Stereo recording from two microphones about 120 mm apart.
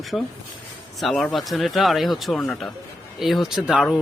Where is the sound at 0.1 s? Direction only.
15° left (ahead or behind).